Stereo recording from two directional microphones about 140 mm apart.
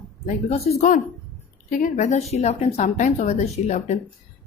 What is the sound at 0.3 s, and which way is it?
Speech, 50° left (ahead or behind).